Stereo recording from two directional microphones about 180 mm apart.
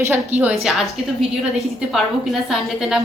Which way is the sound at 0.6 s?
Centre (ahead or behind).